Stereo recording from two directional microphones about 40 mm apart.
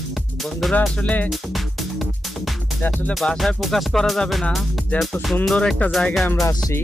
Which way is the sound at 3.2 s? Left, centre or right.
Left.